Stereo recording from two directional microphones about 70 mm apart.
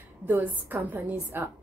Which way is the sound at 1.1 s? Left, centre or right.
Right.